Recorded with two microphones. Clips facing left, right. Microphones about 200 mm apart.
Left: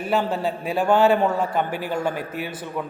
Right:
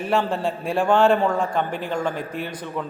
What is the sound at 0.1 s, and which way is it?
A man's voice, 5° left (ahead or behind).